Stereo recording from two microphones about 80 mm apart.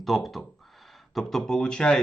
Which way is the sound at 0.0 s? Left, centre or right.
Centre.